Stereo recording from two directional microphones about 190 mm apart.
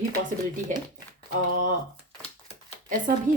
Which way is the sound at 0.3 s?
45° right (ahead or behind).